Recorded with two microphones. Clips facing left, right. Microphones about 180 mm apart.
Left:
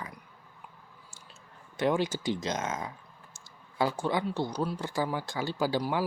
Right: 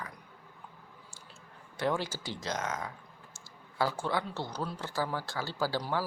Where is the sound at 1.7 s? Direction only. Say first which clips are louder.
Left 4 dB; 20° left (ahead or behind).